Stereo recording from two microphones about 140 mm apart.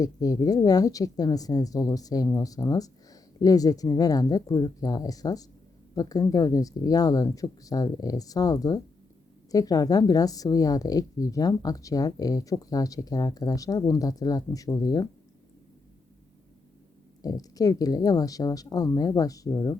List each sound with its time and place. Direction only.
0.0 s a woman's voice: 25° left (ahead or behind)
17.2 s a woman's voice: 25° left (ahead or behind)